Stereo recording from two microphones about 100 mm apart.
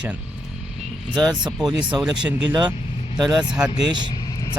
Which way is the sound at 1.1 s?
45° right (ahead or behind).